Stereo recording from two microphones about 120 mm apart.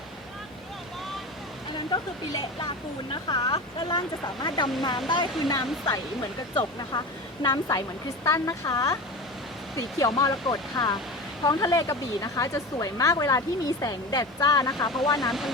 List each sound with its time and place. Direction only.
1.9 s speech: 40° left (ahead or behind)